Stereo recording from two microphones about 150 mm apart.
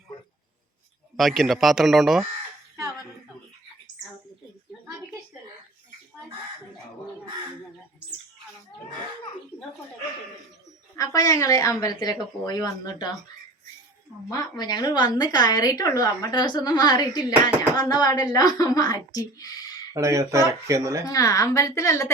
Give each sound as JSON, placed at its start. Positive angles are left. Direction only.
{"t": 1.1, "sound": "speech", "side_deg": 0}
{"t": 10.9, "sound": "a woman's voice", "side_deg": 20}
{"t": 14.3, "sound": "a woman's voice", "side_deg": 25}
{"t": 20.0, "sound": "speech", "side_deg": -20}
{"t": 21.0, "sound": "a woman's voice", "side_deg": 25}